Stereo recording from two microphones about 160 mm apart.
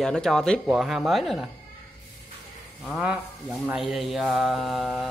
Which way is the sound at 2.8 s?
Centre (ahead or behind).